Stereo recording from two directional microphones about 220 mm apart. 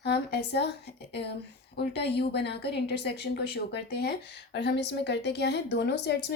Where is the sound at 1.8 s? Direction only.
50° left (ahead or behind).